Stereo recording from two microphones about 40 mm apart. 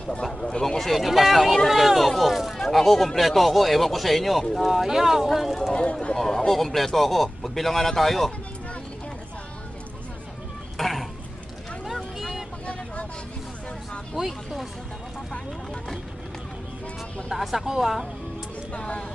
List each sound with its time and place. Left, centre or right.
0.3 s speech: centre
2.6 s speech: centre
5.7 s speech: left
6.1 s speech: centre
10.8 s speech: centre
11.9 s vehicle: centre
14.3 s speech: centre
17.2 s speech: centre
18.7 s speech: left